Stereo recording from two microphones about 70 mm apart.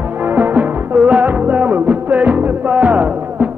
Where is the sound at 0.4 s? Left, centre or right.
Centre.